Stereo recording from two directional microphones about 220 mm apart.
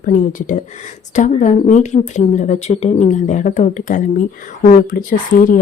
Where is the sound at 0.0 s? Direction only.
35° left (ahead or behind).